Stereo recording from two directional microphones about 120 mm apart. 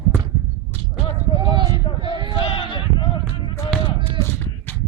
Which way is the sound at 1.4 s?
35° right (ahead or behind).